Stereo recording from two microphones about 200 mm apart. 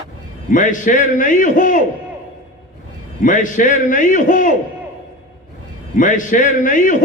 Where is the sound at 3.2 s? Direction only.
40° left (ahead or behind).